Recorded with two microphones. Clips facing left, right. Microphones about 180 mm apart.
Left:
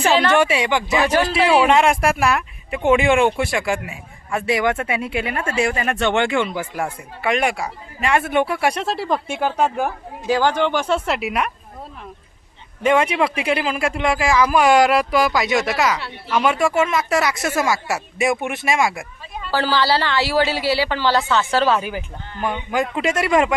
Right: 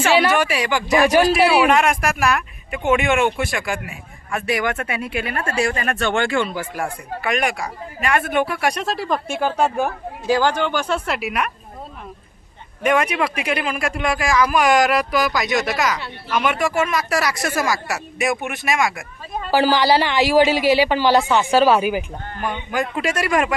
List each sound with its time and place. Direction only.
0.1 s a woman's voice: 10° right (ahead or behind)
0.3 s speech: 25° left (ahead or behind)
10.7 s speech: 25° left (ahead or behind)
12.8 s speech: 25° left (ahead or behind)
15.7 s speech: centre (ahead or behind)
16.4 s speech: 25° left (ahead or behind)
19.5 s a woman's voice: 15° right (ahead or behind)
22.7 s speech: 20° left (ahead or behind)